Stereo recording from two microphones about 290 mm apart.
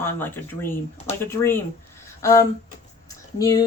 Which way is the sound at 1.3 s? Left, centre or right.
Centre.